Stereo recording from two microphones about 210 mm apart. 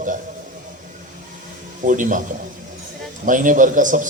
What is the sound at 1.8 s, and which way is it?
Speech, 40° right (ahead or behind).